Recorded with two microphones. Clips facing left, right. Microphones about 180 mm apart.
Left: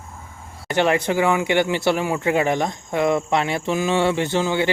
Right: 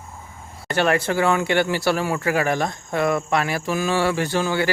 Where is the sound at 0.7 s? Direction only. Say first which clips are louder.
Left 1 dB; 15° left (ahead or behind).